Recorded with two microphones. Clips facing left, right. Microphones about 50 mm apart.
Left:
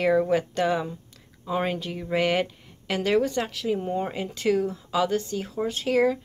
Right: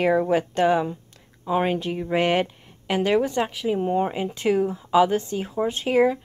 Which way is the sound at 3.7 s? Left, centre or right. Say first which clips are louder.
Right 9 dB; right.